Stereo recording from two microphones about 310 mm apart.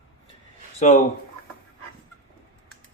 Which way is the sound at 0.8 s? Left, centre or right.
Left.